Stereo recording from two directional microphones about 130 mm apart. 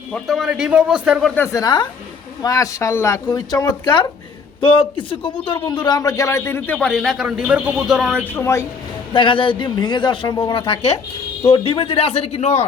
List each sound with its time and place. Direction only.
0.1 s speech: centre (ahead or behind)
1.5 s a man's voice: 30° left (ahead or behind)
6.7 s speech: 5° left (ahead or behind)
8.2 s a woman's voice: 15° left (ahead or behind)
9.1 s a man's voice: 40° left (ahead or behind); by 12.6 s 55° left (ahead or behind)